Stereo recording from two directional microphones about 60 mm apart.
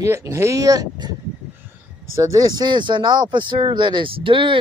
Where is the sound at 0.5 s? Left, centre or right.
Right.